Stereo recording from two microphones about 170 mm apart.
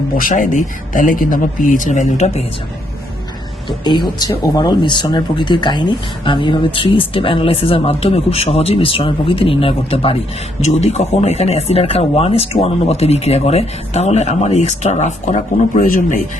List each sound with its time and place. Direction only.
0.2 s a man's voice: 50° left (ahead or behind)
3.7 s speech: 25° left (ahead or behind); by 16.1 s 50° left (ahead or behind)